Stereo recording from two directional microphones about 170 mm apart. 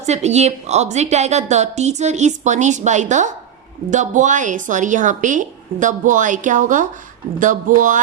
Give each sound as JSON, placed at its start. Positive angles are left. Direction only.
{"t": 0.0, "sound": "a woman's voice", "side_deg": -40}